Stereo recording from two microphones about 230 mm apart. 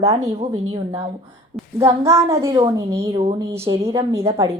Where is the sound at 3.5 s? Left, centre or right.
Centre.